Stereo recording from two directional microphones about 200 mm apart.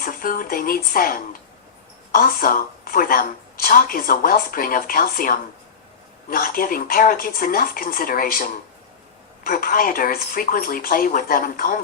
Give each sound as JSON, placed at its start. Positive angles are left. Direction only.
{"t": 0.0, "sound": "a woman's voice", "side_deg": 45}